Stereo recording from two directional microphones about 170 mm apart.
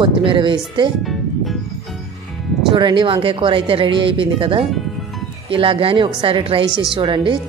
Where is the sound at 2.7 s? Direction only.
25° right (ahead or behind).